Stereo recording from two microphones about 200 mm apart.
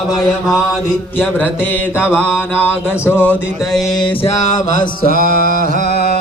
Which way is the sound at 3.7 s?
Centre (ahead or behind).